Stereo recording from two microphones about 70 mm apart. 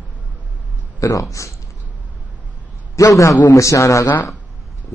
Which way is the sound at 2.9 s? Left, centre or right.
Left.